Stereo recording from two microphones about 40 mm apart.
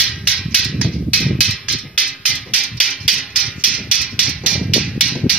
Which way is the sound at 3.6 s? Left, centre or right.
Right.